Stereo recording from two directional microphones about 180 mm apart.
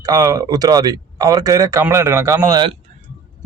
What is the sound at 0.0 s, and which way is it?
Speech, 20° right (ahead or behind).